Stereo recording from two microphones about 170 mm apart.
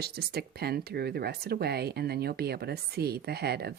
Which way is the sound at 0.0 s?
70° right (ahead or behind).